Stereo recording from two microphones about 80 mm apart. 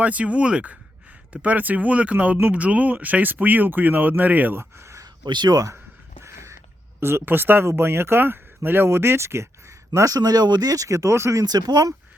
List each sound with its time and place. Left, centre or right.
0.0 s speech: centre
4.8 s a sound: right
5.2 s speech: right
6.2 s crow: right
7.0 s speech: right
10.2 s speech: right